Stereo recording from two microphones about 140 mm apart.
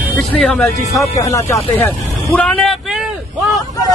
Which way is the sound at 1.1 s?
20° left (ahead or behind).